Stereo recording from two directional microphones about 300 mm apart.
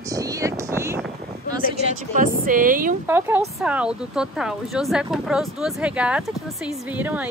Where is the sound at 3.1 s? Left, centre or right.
Centre.